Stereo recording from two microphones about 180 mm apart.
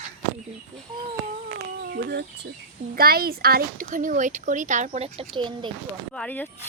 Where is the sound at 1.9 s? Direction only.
65° right (ahead or behind); by 5.7 s 25° right (ahead or behind).